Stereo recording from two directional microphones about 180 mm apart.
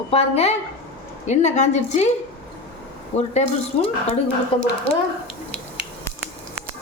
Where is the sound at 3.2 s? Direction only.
35° left (ahead or behind).